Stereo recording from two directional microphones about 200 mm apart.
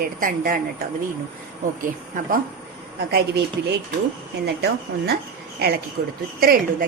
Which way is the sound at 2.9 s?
55° right (ahead or behind).